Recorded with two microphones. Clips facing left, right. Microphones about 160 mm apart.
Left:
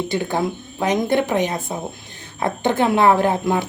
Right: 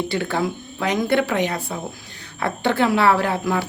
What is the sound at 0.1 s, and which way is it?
Speech, 20° left (ahead or behind).